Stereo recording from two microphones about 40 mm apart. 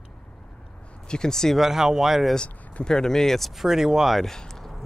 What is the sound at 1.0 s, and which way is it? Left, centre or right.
Speech, centre.